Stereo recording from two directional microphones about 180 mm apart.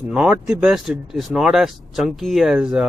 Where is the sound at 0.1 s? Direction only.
5° right (ahead or behind).